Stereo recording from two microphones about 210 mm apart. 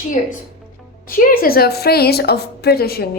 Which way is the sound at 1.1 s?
45° left (ahead or behind).